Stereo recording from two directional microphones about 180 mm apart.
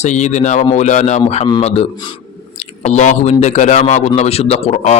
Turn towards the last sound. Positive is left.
turn(degrees=40)  # may be behind; listen again after turning